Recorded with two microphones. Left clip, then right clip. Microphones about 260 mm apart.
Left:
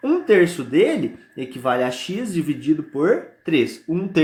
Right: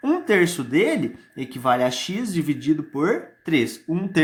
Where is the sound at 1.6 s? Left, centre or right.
Right.